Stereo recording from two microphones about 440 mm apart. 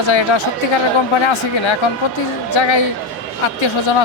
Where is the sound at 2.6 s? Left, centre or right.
Left.